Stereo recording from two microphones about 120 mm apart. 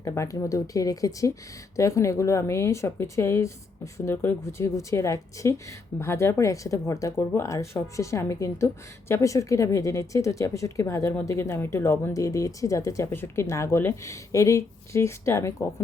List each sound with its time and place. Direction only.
0.0 s speech: 25° left (ahead or behind)